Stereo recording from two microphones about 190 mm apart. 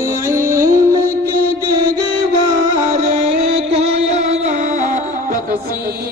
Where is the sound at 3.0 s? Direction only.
35° right (ahead or behind).